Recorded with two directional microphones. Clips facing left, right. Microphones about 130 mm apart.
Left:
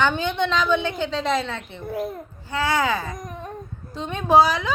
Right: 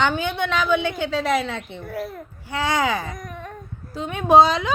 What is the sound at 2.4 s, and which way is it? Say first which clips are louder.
Speech: even; 15° right (ahead or behind).